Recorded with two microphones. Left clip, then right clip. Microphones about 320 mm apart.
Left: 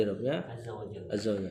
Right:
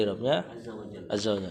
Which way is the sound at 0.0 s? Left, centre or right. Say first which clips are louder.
Right 4 dB; centre.